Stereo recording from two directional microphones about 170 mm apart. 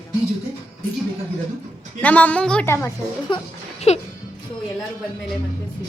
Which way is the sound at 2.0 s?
10° left (ahead or behind).